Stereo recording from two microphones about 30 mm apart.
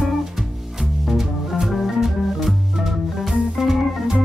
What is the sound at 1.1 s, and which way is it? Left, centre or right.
Music, centre.